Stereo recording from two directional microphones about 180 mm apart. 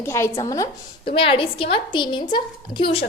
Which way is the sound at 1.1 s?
30° left (ahead or behind).